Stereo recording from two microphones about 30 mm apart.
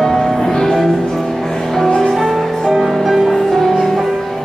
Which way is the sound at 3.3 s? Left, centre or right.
Centre.